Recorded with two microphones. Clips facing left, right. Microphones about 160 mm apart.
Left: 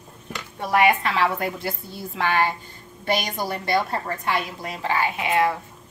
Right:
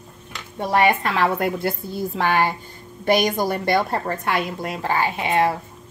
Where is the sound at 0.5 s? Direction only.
35° right (ahead or behind).